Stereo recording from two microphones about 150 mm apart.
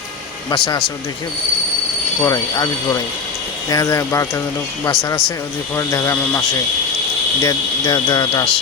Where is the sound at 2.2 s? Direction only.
25° left (ahead or behind).